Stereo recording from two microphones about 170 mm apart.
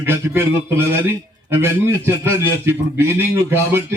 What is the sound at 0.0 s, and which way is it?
A man's voice, 15° right (ahead or behind).